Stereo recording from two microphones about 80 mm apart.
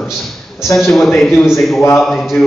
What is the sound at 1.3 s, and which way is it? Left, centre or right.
Speech, left.